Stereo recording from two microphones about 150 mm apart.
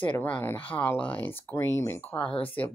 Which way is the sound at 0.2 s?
10° left (ahead or behind).